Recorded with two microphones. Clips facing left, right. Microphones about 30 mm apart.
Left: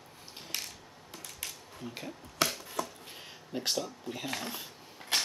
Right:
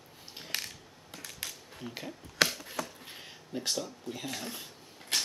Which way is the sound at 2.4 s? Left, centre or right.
Right.